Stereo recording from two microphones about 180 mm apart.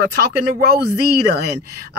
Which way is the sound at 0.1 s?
65° right (ahead or behind).